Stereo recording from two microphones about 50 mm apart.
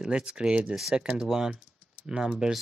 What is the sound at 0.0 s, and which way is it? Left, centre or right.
Speech, centre.